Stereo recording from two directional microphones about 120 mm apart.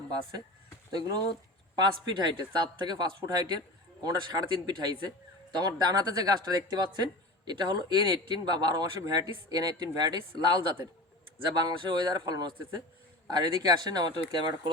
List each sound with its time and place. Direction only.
0.9 s a man's voice: 35° right (ahead or behind)
11.6 s a man's voice: 35° right (ahead or behind)